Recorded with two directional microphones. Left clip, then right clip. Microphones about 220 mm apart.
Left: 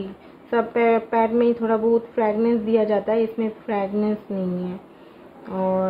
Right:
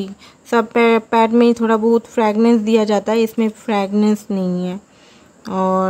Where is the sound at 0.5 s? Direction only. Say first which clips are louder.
Right 5 dB; 40° right (ahead or behind).